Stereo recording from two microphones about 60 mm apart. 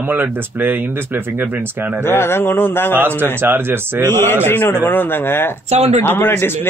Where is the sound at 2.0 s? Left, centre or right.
Left.